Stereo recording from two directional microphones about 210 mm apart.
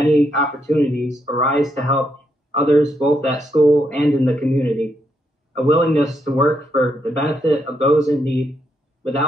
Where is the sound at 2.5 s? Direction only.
35° right (ahead or behind).